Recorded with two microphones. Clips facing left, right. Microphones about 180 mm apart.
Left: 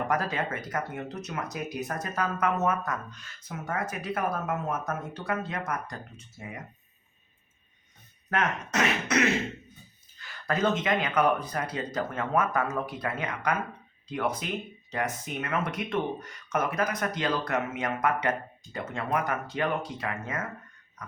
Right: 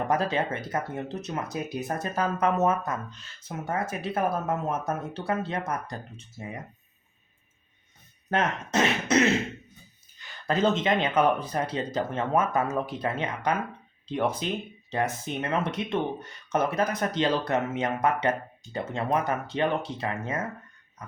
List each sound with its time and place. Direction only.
0.1 s speech: 25° right (ahead or behind)
8.3 s speech: 30° right (ahead or behind)